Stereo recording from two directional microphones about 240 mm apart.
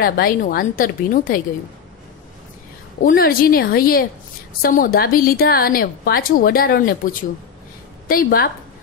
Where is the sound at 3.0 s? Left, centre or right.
Left.